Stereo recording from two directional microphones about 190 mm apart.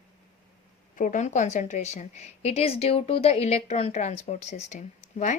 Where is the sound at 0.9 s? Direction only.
40° left (ahead or behind).